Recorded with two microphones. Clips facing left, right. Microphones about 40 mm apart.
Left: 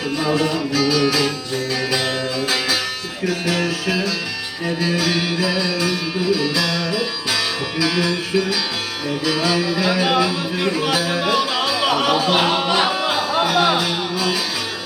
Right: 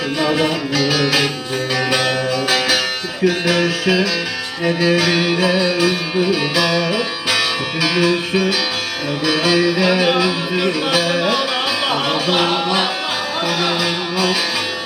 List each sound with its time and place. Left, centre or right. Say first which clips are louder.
0.2 s music: right 2 dB; right
12.6 s music: even; left
13.8 s music: right 3 dB; right